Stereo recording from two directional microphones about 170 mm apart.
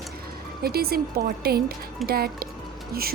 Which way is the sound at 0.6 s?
65° right (ahead or behind).